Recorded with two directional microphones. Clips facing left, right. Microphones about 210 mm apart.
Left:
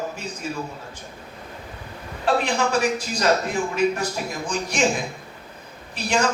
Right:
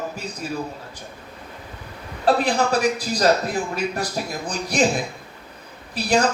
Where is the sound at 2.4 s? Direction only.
35° right (ahead or behind).